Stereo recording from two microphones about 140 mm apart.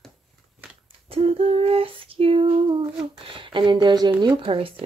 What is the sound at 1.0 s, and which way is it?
Female singing, 45° right (ahead or behind).